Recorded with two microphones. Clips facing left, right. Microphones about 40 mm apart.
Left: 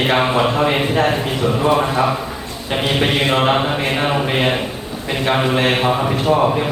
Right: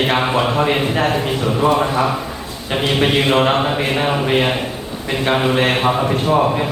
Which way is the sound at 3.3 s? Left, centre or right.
Centre.